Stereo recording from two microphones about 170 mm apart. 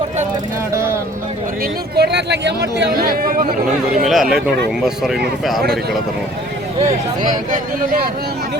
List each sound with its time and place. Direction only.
0.7 s vehicle: 15° right (ahead or behind)
2.0 s speech: 85° right; by 3.4 s 60° right (ahead or behind)
4.0 s speech: centre (ahead or behind)